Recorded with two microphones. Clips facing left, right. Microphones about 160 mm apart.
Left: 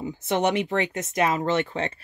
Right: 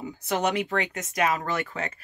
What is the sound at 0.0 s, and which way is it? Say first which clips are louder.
A woman's voice: left 3 dB; 25° left (ahead or behind).